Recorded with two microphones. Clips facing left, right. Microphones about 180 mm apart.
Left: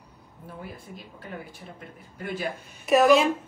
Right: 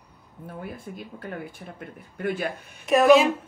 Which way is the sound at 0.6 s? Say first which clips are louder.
Right 5 dB; 55° right (ahead or behind).